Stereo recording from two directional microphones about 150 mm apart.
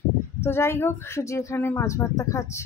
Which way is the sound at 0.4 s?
15° left (ahead or behind).